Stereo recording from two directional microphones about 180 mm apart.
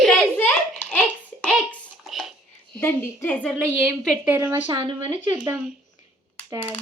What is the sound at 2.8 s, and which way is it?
A woman's voice, 15° left (ahead or behind).